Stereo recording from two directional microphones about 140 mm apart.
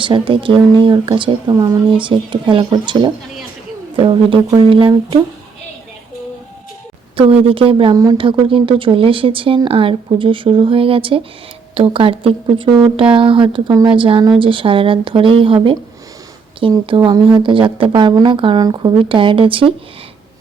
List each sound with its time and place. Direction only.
0.0 s speech: 35° right (ahead or behind)
7.2 s speech: 40° right (ahead or behind)
16.8 s speech: 35° right (ahead or behind)